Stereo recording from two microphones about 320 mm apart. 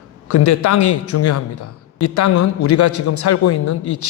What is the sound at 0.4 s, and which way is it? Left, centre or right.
A man's voice, left.